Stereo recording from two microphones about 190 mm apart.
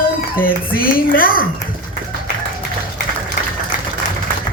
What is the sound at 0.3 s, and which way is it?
Speech, 50° left (ahead or behind).